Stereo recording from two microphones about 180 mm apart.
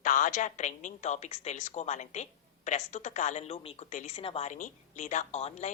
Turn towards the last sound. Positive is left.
turn(degrees=40)  # may be behind; listen again after turning